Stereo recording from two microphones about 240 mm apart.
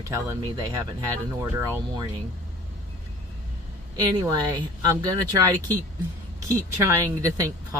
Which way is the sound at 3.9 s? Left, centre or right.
Centre.